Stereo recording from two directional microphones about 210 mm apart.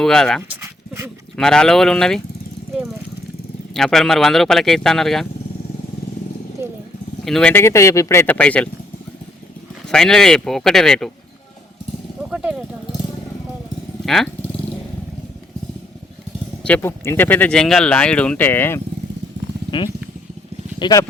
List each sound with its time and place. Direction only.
0.0 s speech: 5° left (ahead or behind)
0.5 s dog: 10° right (ahead or behind)
1.4 s speech: 5° left (ahead or behind)
3.8 s speech: centre (ahead or behind)
6.6 s vehicle: 10° right (ahead or behind)
7.3 s speech: 5° left (ahead or behind)
9.9 s speech: 5° left (ahead or behind)
12.3 s a sound: 5° right (ahead or behind)
14.0 s motorcycle: centre (ahead or behind)
16.6 s speech: 10° left (ahead or behind)
20.7 s speech: 20° left (ahead or behind)